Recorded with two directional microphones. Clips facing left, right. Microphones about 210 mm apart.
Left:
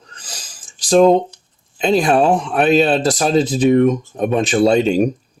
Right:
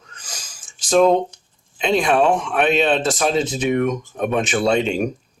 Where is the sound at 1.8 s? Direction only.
35° left (ahead or behind).